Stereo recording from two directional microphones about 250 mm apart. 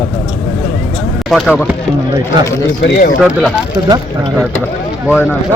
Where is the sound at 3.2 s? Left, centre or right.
Centre.